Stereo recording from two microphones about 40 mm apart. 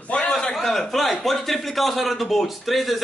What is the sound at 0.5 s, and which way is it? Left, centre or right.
Speech, centre.